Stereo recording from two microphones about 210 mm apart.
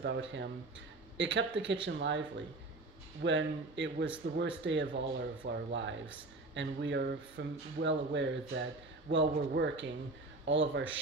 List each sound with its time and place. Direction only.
0.0 s speech: 60° right (ahead or behind)